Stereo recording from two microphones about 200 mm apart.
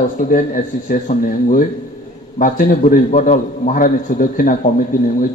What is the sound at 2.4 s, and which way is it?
A man's voice, 40° left (ahead or behind).